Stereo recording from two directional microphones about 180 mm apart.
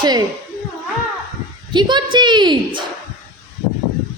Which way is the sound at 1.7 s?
25° right (ahead or behind).